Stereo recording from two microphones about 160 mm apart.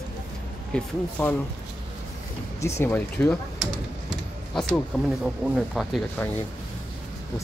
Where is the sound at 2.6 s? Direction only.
15° left (ahead or behind).